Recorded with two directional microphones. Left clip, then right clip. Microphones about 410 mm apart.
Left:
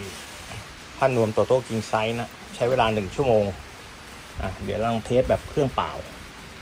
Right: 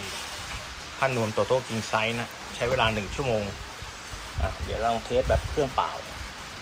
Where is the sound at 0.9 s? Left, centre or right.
Centre.